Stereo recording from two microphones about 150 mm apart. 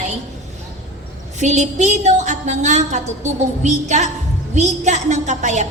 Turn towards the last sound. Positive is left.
turn(degrees=-50)  # may be behind; listen again after turning